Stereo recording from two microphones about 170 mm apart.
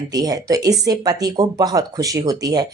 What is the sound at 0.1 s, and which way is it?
Speech, 20° right (ahead or behind).